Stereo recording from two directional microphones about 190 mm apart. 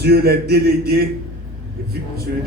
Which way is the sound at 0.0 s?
55° right (ahead or behind).